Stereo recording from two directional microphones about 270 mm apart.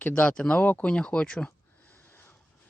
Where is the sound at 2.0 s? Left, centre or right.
Centre.